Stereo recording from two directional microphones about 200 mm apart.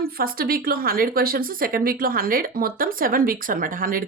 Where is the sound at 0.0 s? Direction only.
45° right (ahead or behind).